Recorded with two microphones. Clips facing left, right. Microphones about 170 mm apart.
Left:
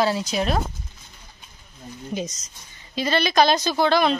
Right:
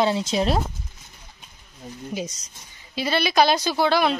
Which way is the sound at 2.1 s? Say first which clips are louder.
Left 2 dB; 10° right (ahead or behind).